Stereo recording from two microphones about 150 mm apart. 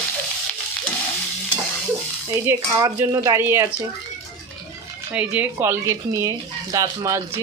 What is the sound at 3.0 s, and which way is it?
Speech, 20° right (ahead or behind).